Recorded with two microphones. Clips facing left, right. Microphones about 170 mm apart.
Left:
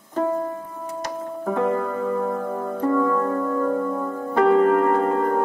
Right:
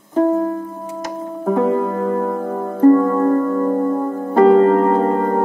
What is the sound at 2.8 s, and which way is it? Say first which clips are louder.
Music: right 9 dB; 40° right (ahead or behind).